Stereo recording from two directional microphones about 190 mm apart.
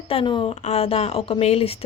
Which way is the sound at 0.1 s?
25° left (ahead or behind).